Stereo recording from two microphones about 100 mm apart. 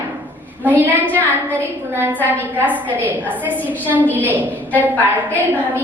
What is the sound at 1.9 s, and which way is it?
A woman's voice, 20° right (ahead or behind).